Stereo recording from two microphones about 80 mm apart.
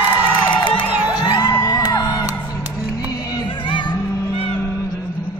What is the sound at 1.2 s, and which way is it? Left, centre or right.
Music, left.